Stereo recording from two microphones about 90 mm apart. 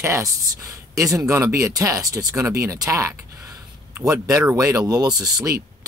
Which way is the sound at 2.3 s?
30° right (ahead or behind).